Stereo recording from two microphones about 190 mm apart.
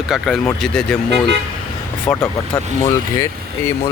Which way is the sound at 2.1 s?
10° left (ahead or behind).